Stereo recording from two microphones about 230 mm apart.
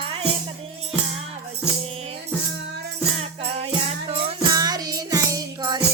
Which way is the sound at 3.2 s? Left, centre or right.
Right.